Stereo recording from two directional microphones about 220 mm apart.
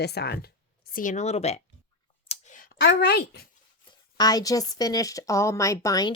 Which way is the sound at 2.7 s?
50° left (ahead or behind).